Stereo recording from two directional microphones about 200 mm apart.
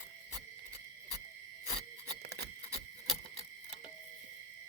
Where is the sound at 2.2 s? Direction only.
55° right (ahead or behind).